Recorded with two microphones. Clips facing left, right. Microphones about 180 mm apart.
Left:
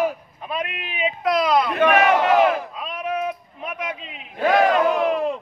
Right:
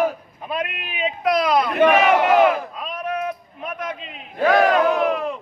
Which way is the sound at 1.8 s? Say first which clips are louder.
Right 3 dB; 15° right (ahead or behind).